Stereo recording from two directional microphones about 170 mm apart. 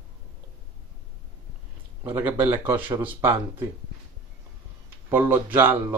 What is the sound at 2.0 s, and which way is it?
Speech, 10° right (ahead or behind).